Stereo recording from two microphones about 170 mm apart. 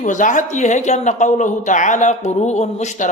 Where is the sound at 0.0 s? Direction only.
45° left (ahead or behind).